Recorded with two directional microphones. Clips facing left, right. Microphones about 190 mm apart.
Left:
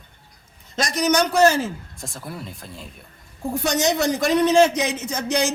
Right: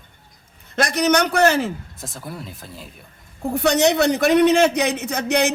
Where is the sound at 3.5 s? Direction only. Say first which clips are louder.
Right 4 dB; 65° right (ahead or behind).